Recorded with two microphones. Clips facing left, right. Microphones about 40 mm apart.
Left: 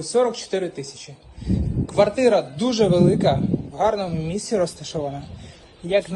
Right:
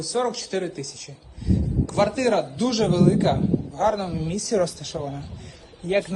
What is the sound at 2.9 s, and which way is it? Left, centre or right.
Speech, left.